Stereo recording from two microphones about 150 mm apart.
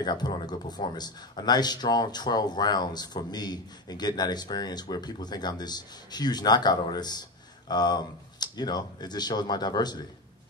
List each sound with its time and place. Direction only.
0.0 s speech: 30° left (ahead or behind)